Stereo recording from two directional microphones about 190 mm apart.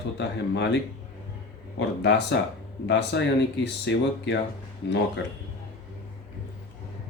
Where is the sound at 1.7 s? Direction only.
65° left (ahead or behind).